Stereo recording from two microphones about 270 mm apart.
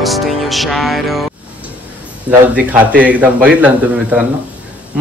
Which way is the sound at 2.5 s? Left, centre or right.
Centre.